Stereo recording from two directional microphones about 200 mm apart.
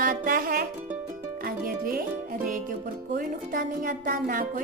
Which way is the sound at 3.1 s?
45° right (ahead or behind).